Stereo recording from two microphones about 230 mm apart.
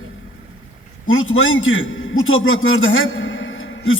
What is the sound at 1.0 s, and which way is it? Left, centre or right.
A man's voice, left.